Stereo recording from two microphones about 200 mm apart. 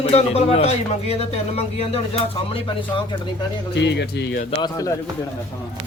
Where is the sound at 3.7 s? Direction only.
60° left (ahead or behind).